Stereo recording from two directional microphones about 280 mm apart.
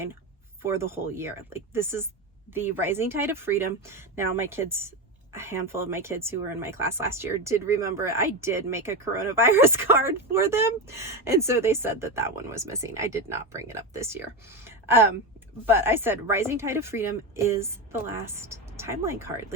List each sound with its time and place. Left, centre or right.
0.6 s speech: centre